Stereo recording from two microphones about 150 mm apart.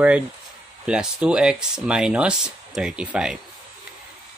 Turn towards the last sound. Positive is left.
turn(degrees=-5)  # may be behind; listen again after turning